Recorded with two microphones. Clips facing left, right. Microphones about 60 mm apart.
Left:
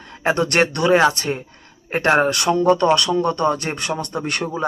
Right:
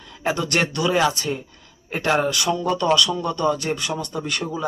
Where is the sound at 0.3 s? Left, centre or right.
Left.